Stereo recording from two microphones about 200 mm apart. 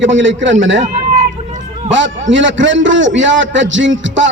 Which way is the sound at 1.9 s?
65° right (ahead or behind).